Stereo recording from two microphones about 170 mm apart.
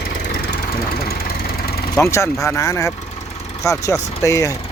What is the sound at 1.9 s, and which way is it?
Speech, 15° left (ahead or behind).